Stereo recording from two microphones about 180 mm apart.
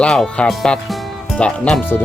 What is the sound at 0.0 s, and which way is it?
Speech, 5° left (ahead or behind).